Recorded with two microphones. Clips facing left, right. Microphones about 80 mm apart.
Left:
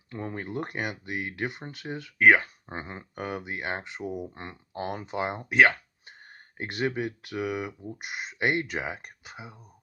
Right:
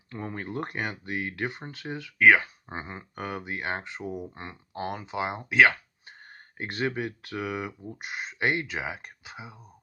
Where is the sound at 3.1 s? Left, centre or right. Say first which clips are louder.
Even; centre.